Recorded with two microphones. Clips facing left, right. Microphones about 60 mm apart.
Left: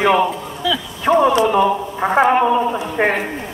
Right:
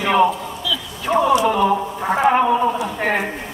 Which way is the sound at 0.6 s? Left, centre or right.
Left.